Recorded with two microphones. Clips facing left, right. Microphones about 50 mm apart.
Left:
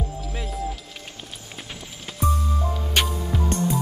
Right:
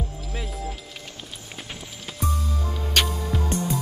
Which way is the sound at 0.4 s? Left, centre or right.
Centre.